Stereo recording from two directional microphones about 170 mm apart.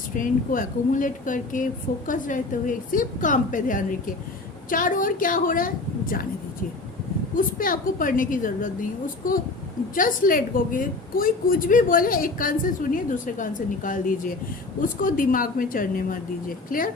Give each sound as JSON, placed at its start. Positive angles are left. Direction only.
{"t": 0.2, "sound": "a woman's voice", "side_deg": 50}
{"t": 7.3, "sound": "a woman's voice", "side_deg": 55}